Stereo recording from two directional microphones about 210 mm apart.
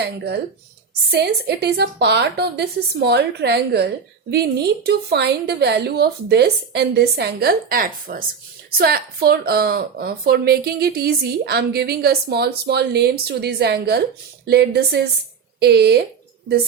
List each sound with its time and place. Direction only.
1.1 s a woman's voice: 50° right (ahead or behind)